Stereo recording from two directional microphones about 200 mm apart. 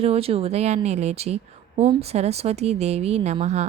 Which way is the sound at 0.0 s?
30° right (ahead or behind).